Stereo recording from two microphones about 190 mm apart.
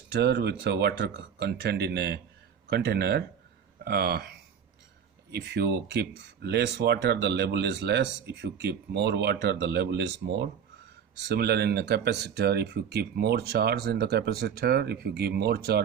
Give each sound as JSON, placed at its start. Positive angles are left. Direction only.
{"t": 0.1, "sound": "speech", "side_deg": -60}